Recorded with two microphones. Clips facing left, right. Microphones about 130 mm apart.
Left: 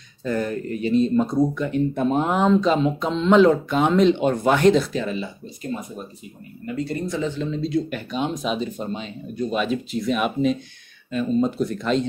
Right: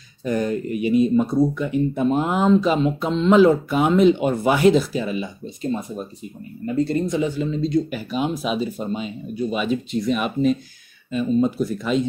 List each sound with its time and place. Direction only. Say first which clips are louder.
0.2 s speech: right 2 dB; 20° right (ahead or behind)
1.2 s speech: right 1 dB; 20° left (ahead or behind)
1.5 s speech: right 1 dB; 10° right (ahead or behind)
5.6 s speech: right 4 dB; 25° right (ahead or behind)
7.2 s speech: right 3 dB; 10° right (ahead or behind)